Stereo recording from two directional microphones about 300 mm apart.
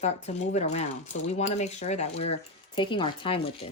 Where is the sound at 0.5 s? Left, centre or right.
Left.